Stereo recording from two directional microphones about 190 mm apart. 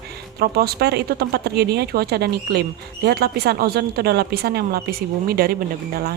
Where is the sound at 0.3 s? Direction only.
55° right (ahead or behind).